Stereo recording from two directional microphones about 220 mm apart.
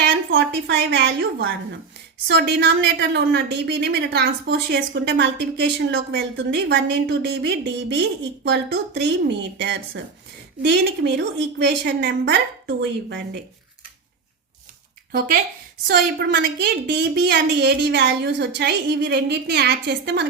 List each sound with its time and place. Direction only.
0.0 s a woman's voice: 50° right (ahead or behind)
15.9 s a woman's voice: 45° right (ahead or behind)